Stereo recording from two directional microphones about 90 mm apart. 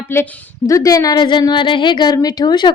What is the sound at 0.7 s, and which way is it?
A woman's voice, 40° left (ahead or behind).